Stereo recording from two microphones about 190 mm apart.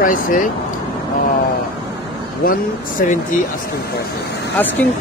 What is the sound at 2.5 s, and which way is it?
Speech, 50° left (ahead or behind).